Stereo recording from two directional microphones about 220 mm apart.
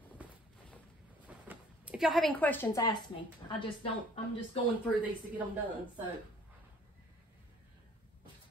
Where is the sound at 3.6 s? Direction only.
25° left (ahead or behind).